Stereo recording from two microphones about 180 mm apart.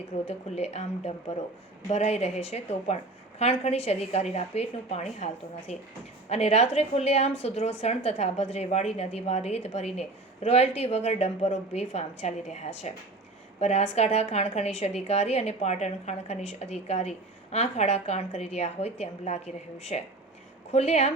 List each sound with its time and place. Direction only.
0.3 s a woman's voice: 35° left (ahead or behind)